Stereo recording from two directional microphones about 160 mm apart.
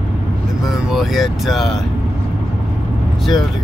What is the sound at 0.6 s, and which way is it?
Speech, centre (ahead or behind).